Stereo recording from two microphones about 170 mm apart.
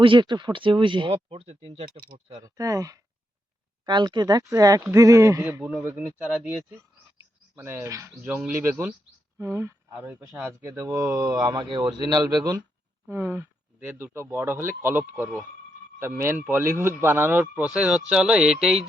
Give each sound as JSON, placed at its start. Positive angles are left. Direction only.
{"t": 0.0, "sound": "speech", "side_deg": -30}
{"t": 13.1, "sound": "speech", "side_deg": -15}